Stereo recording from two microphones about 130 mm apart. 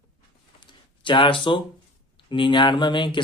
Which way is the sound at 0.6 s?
35° left (ahead or behind).